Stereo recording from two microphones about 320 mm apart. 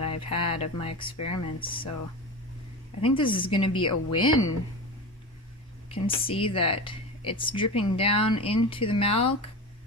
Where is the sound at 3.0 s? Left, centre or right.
Centre.